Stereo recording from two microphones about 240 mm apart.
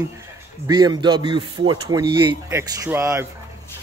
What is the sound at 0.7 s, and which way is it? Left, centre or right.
Speech, centre.